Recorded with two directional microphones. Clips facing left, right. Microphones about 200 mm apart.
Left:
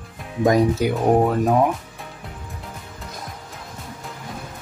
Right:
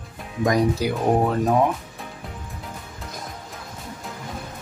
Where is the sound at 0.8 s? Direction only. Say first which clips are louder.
Left 3 dB; 20° left (ahead or behind).